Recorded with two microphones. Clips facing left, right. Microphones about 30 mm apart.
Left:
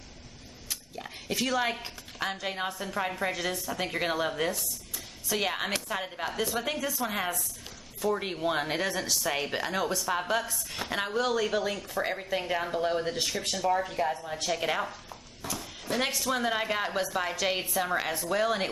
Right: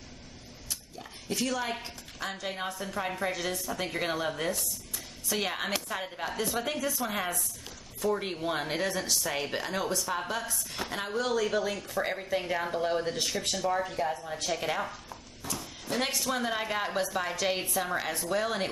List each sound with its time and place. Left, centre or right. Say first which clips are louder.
0.9 s speech: left 2 dB; left; by 15.1 s centre
15.5 s a sound: left 1 dB; centre
16.2 s speech: left 2 dB; centre